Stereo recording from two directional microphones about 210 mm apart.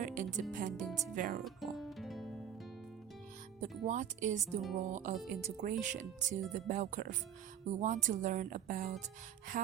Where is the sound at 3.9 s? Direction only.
35° right (ahead or behind).